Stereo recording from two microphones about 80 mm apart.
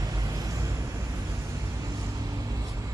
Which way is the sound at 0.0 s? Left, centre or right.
Right.